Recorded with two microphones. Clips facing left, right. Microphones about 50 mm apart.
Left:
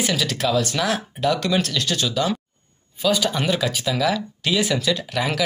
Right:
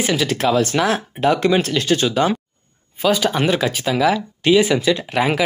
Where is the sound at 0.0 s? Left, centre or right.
Right.